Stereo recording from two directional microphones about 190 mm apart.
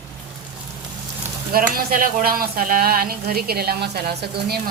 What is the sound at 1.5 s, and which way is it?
Speech, 50° right (ahead or behind).